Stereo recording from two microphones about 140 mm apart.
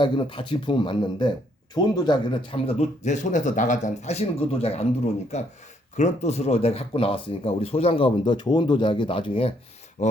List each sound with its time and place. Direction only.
0.0 s speech: 35° left (ahead or behind)
10.0 s speech: 55° left (ahead or behind)